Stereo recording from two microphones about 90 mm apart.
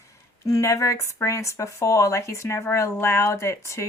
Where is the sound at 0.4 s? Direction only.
35° left (ahead or behind).